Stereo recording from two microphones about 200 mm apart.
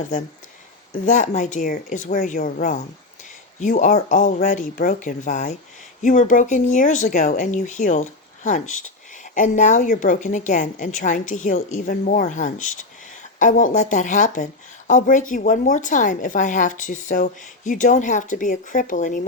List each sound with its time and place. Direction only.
1.0 s speech: 40° left (ahead or behind)